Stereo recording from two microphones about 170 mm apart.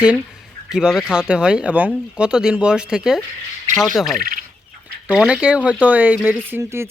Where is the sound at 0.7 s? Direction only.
5° right (ahead or behind).